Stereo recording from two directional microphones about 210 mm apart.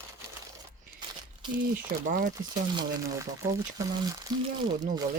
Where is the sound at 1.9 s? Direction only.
45° right (ahead or behind).